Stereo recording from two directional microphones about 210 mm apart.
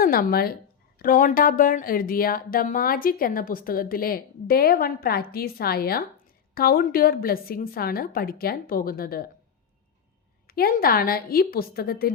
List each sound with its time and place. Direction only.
0.0 s speech: 45° left (ahead or behind)
10.4 s speech: 45° left (ahead or behind)